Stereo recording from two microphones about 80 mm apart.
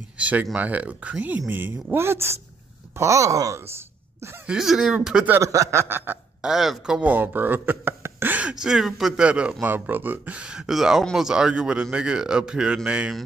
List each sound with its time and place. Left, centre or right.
0.2 s speech: centre; by 3.7 s right
4.5 s speech: centre
5.4 s speech: right
6.4 s speech: centre
7.0 s speech: right
8.4 s a man's voice: centre